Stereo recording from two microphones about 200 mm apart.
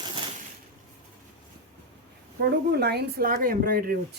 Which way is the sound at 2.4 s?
55° right (ahead or behind).